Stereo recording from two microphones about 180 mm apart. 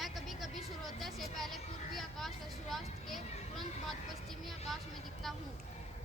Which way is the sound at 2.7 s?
Centre (ahead or behind).